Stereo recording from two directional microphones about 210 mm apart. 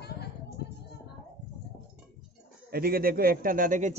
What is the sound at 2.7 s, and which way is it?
A man's voice, 45° right (ahead or behind).